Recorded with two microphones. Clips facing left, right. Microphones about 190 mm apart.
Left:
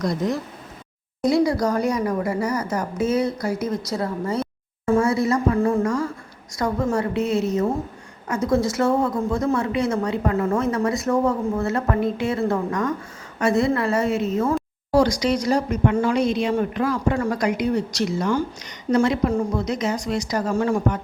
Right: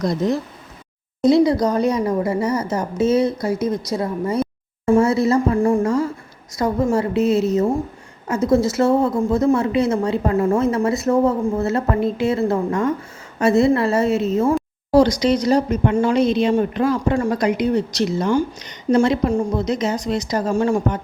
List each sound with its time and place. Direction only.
1.2 s speech: 25° right (ahead or behind)